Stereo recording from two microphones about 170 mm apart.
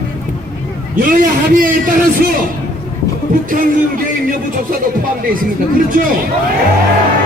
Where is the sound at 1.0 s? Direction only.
55° right (ahead or behind).